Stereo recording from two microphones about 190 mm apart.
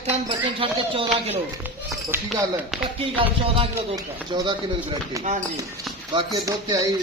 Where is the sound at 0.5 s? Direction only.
30° right (ahead or behind).